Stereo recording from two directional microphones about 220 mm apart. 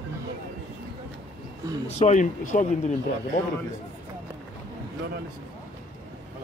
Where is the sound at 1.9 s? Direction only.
30° left (ahead or behind).